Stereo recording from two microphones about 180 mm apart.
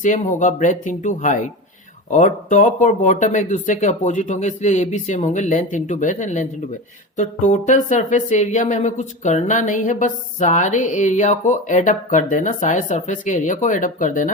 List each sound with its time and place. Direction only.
0.0 s speech: 45° left (ahead or behind)